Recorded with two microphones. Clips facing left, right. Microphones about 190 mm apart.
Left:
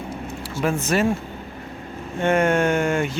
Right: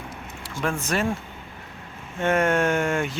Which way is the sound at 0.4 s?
5° left (ahead or behind).